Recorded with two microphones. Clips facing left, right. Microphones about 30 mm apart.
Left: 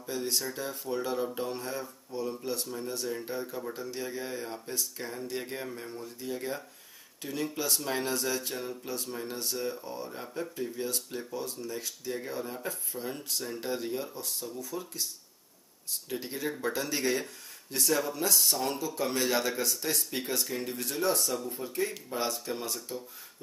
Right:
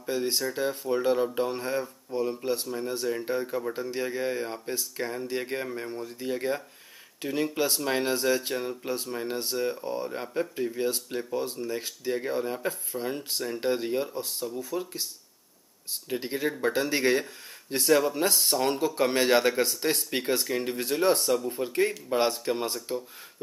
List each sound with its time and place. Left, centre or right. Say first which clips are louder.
0.0 s speech: right 5 dB; right